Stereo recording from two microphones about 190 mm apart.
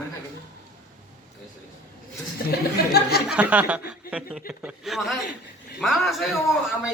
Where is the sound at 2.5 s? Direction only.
55° left (ahead or behind).